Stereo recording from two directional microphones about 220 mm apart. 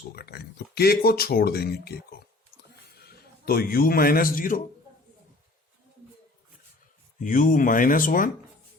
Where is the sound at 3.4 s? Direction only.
45° left (ahead or behind).